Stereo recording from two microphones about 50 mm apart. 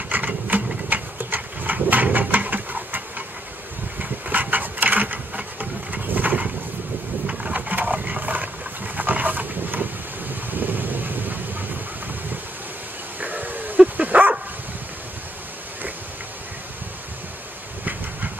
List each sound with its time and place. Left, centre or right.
0.1 s sewing machine: right
0.5 s a sound: right
4.0 s sewing machine: right
7.5 s vehicle: right
13.2 s dog: right